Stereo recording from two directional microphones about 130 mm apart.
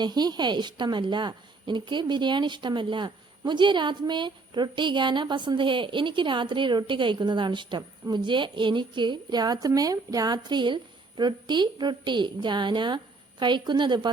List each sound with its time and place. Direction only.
0.0 s a woman's voice: 30° right (ahead or behind)